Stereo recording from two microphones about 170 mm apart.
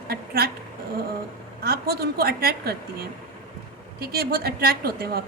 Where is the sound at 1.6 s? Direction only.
65° right (ahead or behind).